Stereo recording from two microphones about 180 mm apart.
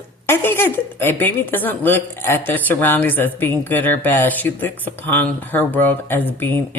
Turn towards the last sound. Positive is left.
turn(degrees=10)  # may be behind; listen again after turning